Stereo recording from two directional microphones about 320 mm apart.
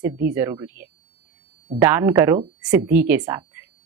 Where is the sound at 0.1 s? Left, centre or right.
Right.